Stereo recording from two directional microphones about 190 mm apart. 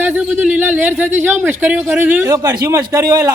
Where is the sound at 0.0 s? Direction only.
10° right (ahead or behind).